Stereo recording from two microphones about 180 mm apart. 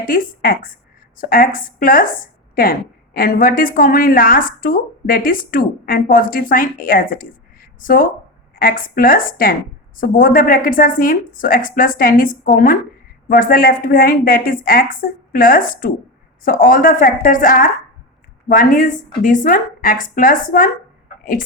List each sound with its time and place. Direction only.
0.0 s a woman's voice: 50° left (ahead or behind)